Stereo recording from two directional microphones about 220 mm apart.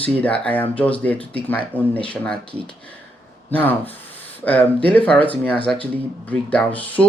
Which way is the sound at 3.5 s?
10° left (ahead or behind).